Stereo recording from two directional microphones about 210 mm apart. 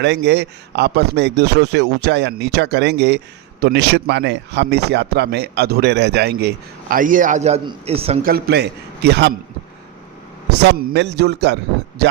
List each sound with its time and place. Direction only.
0.0 s speech: 55° right (ahead or behind)
6.9 s a man's voice: 40° right (ahead or behind)
8.2 s speech: 50° right (ahead or behind)
10.6 s speech: 50° right (ahead or behind)